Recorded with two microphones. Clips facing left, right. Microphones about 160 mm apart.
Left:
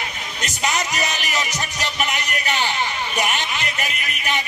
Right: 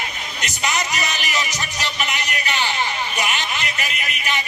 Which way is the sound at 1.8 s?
45° left (ahead or behind).